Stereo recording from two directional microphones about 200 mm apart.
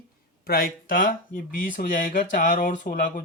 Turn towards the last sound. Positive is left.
turn(degrees=40)  # may be behind; listen again after turning